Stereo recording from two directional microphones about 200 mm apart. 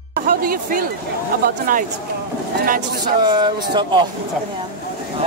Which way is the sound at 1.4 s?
45° right (ahead or behind).